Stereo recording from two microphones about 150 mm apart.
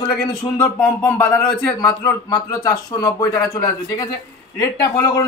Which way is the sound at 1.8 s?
25° left (ahead or behind).